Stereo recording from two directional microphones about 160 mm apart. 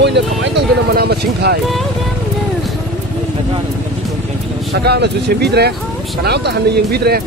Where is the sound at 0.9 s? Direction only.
90° right.